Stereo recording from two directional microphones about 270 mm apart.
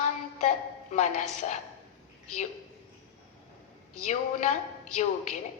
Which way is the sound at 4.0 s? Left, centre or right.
Left.